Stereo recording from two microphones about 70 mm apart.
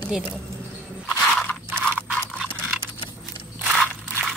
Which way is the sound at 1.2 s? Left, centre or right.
Centre.